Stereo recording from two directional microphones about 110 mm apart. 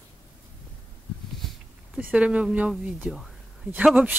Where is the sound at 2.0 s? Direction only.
15° right (ahead or behind).